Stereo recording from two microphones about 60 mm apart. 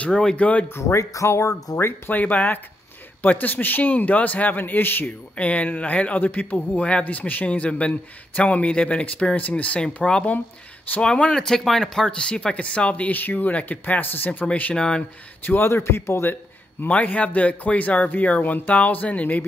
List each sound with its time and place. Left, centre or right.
0.0 s a man's voice: centre
0.7 s speech: left
1.8 s a man's voice: left
5.3 s a man's voice: left
15.4 s speech: left
15.7 s speech: left
16.8 s a man's voice: left